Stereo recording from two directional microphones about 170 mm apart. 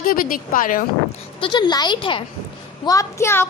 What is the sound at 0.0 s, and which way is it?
Speech, 55° left (ahead or behind).